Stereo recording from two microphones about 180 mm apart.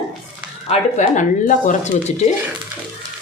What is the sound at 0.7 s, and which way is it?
Speech, 40° left (ahead or behind).